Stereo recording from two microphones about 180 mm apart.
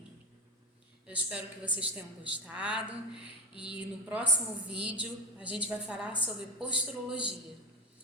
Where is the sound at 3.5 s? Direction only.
25° left (ahead or behind).